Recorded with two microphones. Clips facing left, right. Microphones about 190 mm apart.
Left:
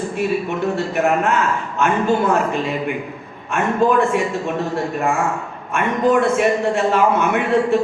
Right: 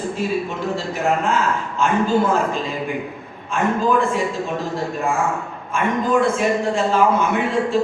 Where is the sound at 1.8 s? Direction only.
65° left (ahead or behind).